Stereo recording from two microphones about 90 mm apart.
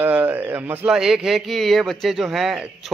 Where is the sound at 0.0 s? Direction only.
20° right (ahead or behind).